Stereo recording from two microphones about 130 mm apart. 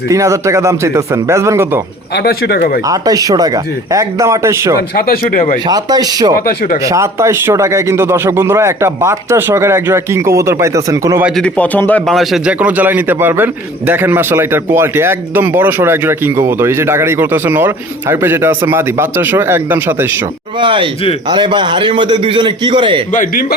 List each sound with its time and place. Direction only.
0.1 s speech: 25° right (ahead or behind)
2.8 s speech: 25° right (ahead or behind)
5.2 s speech: 85° left
5.6 s a man's voice: 30° right (ahead or behind)
11.3 s a man's voice: 10° left (ahead or behind)
12.1 s a man's voice: centre (ahead or behind)
12.5 s a man's voice: 10° right (ahead or behind)
20.6 s a man's voice: 40° right (ahead or behind)
23.1 s speech: 90° left